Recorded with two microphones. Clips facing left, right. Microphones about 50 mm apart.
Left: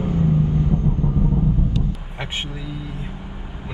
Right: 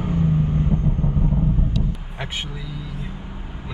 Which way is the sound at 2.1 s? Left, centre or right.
Left.